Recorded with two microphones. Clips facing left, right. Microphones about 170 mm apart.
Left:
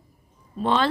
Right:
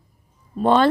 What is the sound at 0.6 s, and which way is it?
Speech, 50° right (ahead or behind).